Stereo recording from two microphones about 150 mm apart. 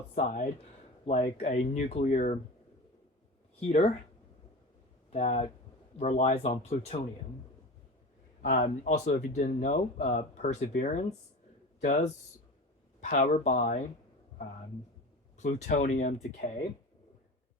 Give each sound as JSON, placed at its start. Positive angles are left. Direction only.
{"t": 0.1, "sound": "speech", "side_deg": 55}
{"t": 0.6, "sound": "speech", "side_deg": 45}
{"t": 3.7, "sound": "speech", "side_deg": 50}
{"t": 5.1, "sound": "speech", "side_deg": 45}
{"t": 8.4, "sound": "speech", "side_deg": 75}
{"t": 10.7, "sound": "speech", "side_deg": 70}
{"t": 11.8, "sound": "speech", "side_deg": 50}
{"t": 15.4, "sound": "speech", "side_deg": 50}